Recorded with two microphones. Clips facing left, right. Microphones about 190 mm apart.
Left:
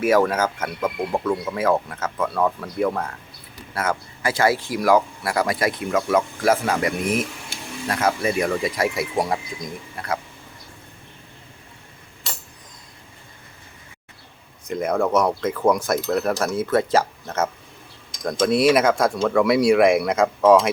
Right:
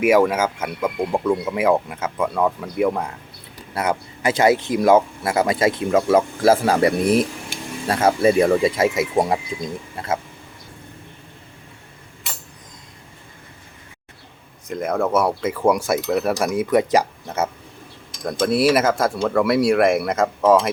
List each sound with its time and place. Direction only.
0.0 s speech: 10° right (ahead or behind)
14.7 s speech: centre (ahead or behind)